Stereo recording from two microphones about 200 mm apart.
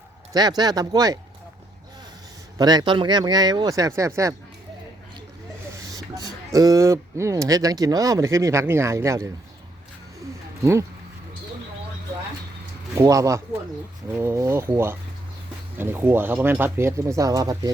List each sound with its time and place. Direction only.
0.3 s speech: 20° right (ahead or behind)
2.6 s speech: 20° right (ahead or behind)
5.7 s speech: 20° right (ahead or behind)
10.6 s speech: 15° right (ahead or behind)
13.0 s speech: 15° right (ahead or behind)